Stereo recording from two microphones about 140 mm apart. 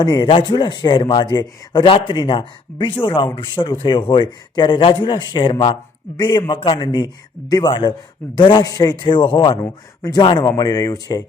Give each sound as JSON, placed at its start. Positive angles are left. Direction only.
{"t": 0.0, "sound": "a man's voice", "side_deg": 35}